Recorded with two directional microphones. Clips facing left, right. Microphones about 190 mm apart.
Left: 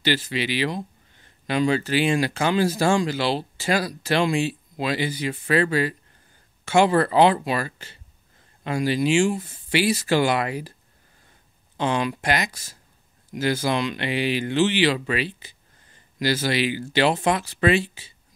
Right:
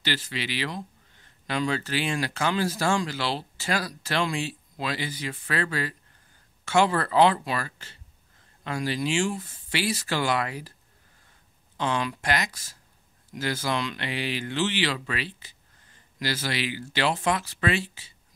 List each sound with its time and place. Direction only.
0.0 s speech: 15° left (ahead or behind)
11.7 s speech: 20° left (ahead or behind)